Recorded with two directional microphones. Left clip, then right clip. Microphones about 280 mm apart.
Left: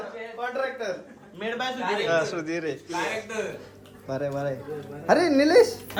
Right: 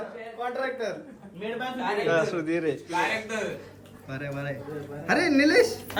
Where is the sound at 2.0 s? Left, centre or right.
Centre.